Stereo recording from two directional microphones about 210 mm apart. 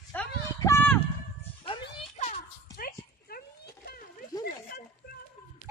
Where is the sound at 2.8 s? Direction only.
45° left (ahead or behind).